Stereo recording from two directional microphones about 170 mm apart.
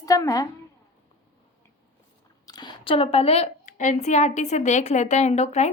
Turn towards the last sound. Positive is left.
turn(degrees=40)  # may be behind; listen again after turning